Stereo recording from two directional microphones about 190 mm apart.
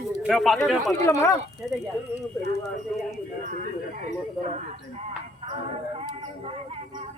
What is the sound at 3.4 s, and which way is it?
Speech, 45° right (ahead or behind).